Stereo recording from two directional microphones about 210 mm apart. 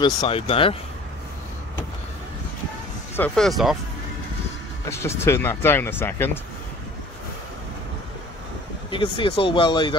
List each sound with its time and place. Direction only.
0.0 s speech: 25° left (ahead or behind)
3.2 s speech: centre (ahead or behind)
4.8 s speech: 15° left (ahead or behind)
8.9 s speech: 25° left (ahead or behind)